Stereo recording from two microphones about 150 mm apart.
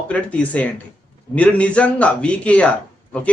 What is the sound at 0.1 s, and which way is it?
A man's voice, 10° left (ahead or behind).